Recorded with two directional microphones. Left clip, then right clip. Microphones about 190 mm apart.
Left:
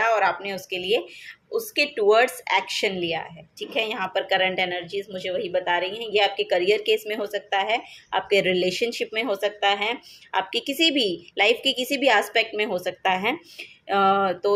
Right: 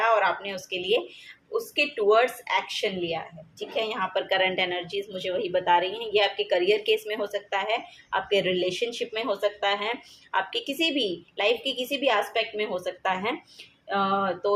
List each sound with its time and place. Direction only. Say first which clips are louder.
0.0 s a woman's voice: left 2 dB; 25° left (ahead or behind)